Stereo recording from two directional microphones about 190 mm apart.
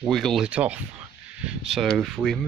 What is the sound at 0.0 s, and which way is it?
Speech, centre (ahead or behind).